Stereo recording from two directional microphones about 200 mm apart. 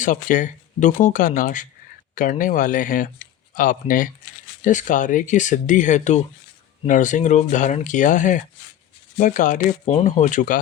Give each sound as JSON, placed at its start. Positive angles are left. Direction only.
{"t": 0.0, "sound": "speech", "side_deg": 40}